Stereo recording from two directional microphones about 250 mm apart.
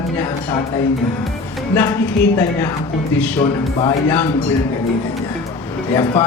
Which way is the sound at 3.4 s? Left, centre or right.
Centre.